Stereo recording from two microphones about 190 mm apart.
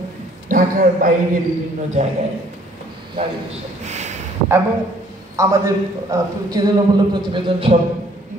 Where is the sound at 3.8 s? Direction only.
35° right (ahead or behind).